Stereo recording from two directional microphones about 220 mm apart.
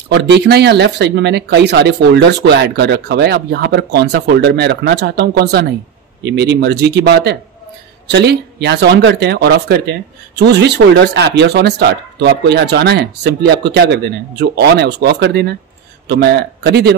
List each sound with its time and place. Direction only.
0.1 s speech: 50° right (ahead or behind)